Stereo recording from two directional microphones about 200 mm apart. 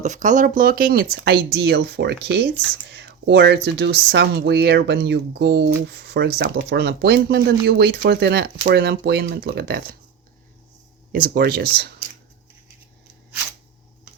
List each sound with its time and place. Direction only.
0.0 s speech: 35° right (ahead or behind)
11.1 s speech: 45° right (ahead or behind)